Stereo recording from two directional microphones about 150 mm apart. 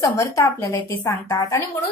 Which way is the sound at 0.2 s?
20° left (ahead or behind).